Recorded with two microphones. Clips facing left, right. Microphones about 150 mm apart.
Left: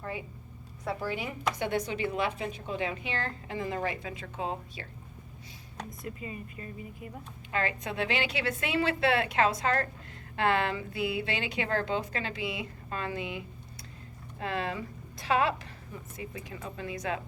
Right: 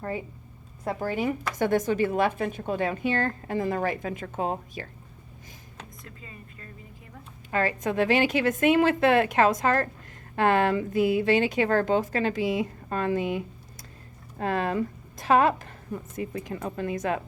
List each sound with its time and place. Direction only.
0.9 s speech: 45° right (ahead or behind)
6.0 s speech: 15° left (ahead or behind)
7.5 s a woman's voice: 40° right (ahead or behind)